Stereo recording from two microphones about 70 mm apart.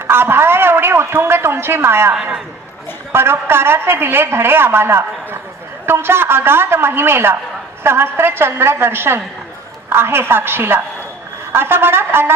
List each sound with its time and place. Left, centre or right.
0.0 s a man's voice: right